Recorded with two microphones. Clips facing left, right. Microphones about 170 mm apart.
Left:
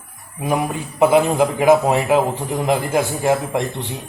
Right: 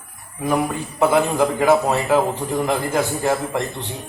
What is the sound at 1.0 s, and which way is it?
A man's voice, 15° left (ahead or behind).